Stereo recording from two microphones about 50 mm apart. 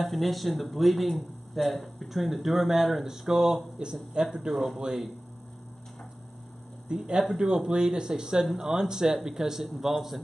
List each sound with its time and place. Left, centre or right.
0.0 s speech: centre
6.9 s speech: centre
7.2 s speech: centre